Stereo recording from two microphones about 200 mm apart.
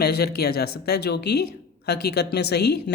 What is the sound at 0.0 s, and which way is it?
A woman's voice, 55° left (ahead or behind).